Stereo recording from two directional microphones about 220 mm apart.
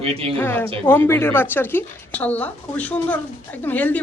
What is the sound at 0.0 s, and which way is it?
Speech, 25° right (ahead or behind).